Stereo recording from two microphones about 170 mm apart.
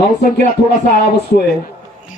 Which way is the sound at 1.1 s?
70° left (ahead or behind).